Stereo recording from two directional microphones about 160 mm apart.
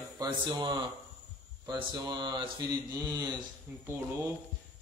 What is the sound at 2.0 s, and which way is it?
Speech, 25° right (ahead or behind).